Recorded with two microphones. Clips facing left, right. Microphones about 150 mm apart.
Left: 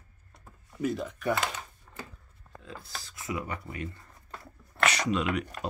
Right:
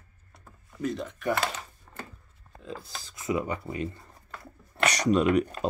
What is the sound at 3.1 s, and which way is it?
Speech, 25° right (ahead or behind).